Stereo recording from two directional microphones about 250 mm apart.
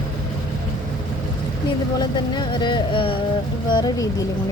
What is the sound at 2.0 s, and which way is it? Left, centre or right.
Speech, centre.